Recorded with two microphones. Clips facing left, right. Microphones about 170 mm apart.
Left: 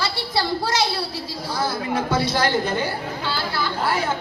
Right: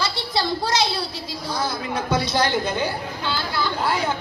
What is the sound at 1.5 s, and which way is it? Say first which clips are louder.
A woman's voice: left 2 dB; 20° right (ahead or behind).